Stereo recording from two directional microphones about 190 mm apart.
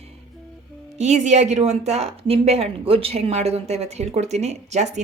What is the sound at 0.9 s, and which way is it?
A woman's voice, 40° right (ahead or behind).